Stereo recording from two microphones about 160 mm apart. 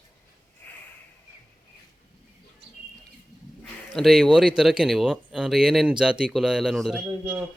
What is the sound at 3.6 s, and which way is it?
Speech, centre (ahead or behind).